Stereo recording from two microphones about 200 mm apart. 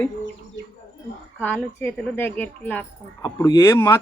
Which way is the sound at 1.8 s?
10° left (ahead or behind).